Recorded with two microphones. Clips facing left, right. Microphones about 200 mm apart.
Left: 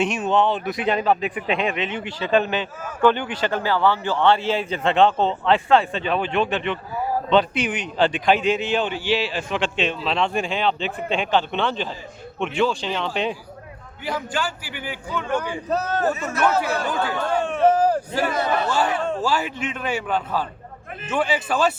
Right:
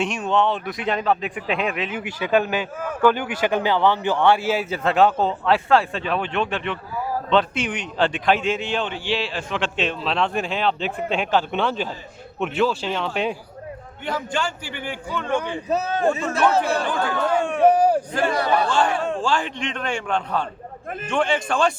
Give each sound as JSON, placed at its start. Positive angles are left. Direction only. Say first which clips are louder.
{"t": 0.0, "sound": "a man's voice", "louder": "left 1 dB", "side_deg": 0}
{"t": 16.3, "sound": "speech", "louder": "right 2 dB", "side_deg": -30}
{"t": 16.8, "sound": "a man's voice", "louder": "right 1 dB", "side_deg": 5}
{"t": 17.4, "sound": "speech", "louder": "right 1 dB", "side_deg": -15}
{"t": 18.7, "sound": "a man's voice", "louder": "right 1 dB", "side_deg": 5}